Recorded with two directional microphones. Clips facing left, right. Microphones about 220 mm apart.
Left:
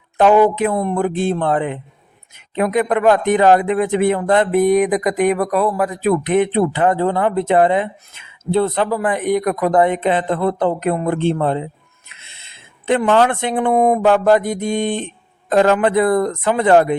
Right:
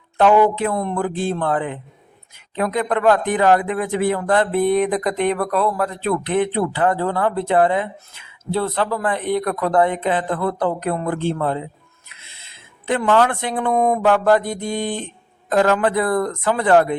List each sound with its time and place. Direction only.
0.2 s a woman's voice: 15° left (ahead or behind)
12.0 s owl: 20° left (ahead or behind)
12.8 s a man's voice: 20° left (ahead or behind)
13.7 s a woman's voice: 15° left (ahead or behind)